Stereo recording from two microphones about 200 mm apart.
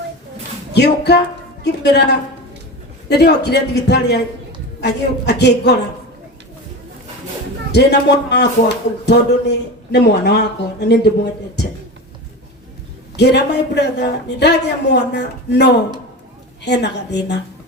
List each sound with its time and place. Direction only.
0.7 s a man's voice: 55° left (ahead or behind)
7.7 s a man's voice: 55° left (ahead or behind)
13.1 s a man's voice: 55° left (ahead or behind)